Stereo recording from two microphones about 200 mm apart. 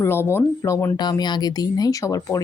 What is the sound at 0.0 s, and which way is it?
Speech, 10° left (ahead or behind).